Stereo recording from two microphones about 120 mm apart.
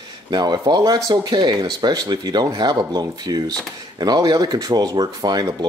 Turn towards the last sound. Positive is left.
turn(degrees=-35)  # may be behind; listen again after turning